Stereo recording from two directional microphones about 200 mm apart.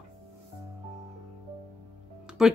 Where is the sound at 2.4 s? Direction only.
5° right (ahead or behind).